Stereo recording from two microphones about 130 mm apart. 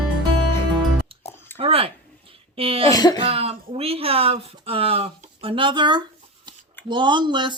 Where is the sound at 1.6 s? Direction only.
45° right (ahead or behind).